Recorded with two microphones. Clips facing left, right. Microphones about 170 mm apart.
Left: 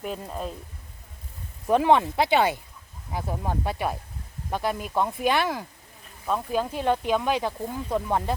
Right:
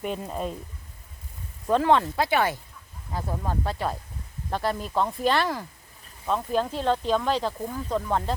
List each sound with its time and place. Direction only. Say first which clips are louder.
0.0 s speech: right 2 dB; centre (ahead or behind)
1.6 s speech: left 1 dB; 15° left (ahead or behind)